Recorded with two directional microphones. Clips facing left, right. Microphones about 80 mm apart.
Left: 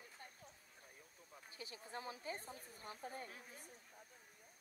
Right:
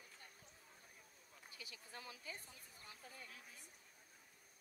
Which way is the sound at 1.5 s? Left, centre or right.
Left.